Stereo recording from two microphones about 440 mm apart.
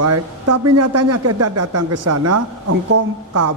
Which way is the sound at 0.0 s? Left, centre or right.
Right.